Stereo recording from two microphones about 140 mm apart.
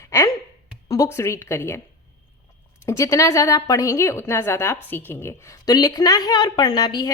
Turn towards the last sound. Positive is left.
turn(degrees=30)  # may be behind; listen again after turning